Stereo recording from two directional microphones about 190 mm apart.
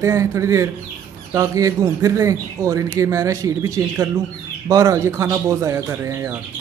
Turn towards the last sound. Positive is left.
turn(degrees=-15)  # may be behind; listen again after turning